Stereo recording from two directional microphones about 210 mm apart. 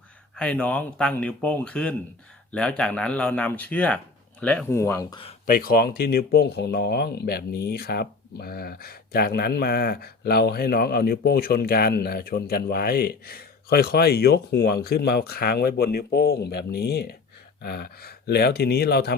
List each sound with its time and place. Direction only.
0.3 s speech: 5° left (ahead or behind)
5.5 s speech: 45° left (ahead or behind)